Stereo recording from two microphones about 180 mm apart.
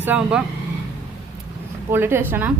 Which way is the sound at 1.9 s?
10° right (ahead or behind).